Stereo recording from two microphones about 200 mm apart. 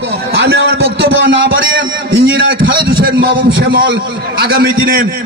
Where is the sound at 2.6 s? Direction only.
50° right (ahead or behind).